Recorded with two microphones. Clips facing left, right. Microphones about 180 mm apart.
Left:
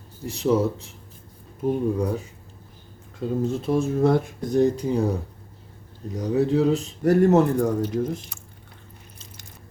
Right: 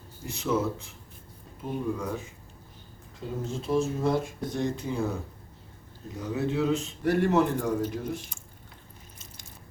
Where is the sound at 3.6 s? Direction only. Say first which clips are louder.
Left 4 dB; 55° left (ahead or behind); by 5.0 s 40° left (ahead or behind).